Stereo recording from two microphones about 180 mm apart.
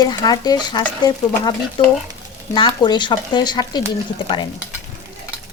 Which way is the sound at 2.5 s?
25° left (ahead or behind).